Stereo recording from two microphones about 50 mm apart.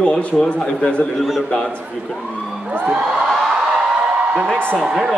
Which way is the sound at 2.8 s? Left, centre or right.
Centre.